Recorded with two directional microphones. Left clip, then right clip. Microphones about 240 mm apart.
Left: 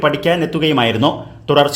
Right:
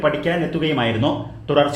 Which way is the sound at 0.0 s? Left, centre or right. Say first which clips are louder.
Left 4 dB; left.